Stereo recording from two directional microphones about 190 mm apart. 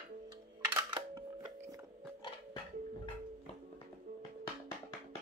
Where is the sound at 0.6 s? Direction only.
20° right (ahead or behind).